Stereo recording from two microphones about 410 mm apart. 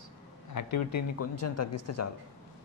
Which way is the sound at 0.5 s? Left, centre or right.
Left.